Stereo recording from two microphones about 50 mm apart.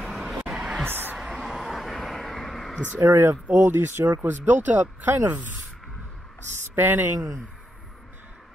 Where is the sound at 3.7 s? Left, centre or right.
Right.